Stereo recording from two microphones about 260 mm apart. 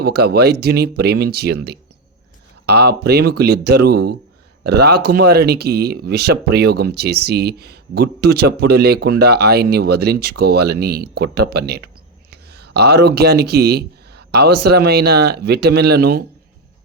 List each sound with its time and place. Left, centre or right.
0.0 s speech: right